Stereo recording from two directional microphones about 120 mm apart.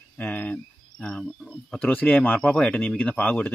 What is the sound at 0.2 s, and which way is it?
Cricket, 15° left (ahead or behind).